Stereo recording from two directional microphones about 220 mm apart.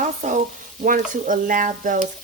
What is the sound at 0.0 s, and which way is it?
Frying, 35° right (ahead or behind).